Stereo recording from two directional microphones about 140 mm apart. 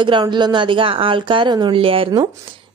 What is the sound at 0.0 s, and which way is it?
A woman's voice, 35° right (ahead or behind).